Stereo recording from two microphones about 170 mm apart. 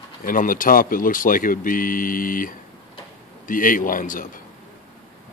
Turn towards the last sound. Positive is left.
turn(degrees=50)  # may be behind; listen again after turning